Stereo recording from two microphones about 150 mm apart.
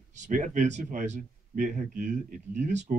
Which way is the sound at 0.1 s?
55° right (ahead or behind).